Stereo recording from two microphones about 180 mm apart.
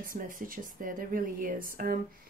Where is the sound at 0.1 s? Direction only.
50° right (ahead or behind).